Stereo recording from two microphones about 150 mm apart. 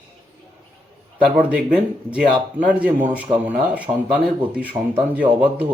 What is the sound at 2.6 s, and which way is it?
Speech, 10° right (ahead or behind).